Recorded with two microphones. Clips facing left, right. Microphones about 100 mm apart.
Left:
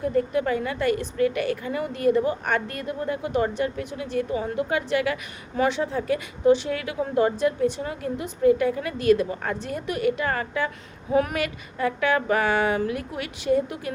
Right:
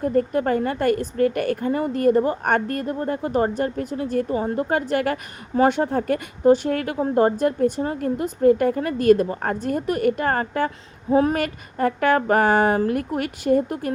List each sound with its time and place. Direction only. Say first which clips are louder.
0.0 s a woman's voice: right 3 dB; 45° right (ahead or behind)
11.1 s speech: right 4 dB; 30° right (ahead or behind)
11.4 s a woman's voice: right 4 dB; 45° right (ahead or behind)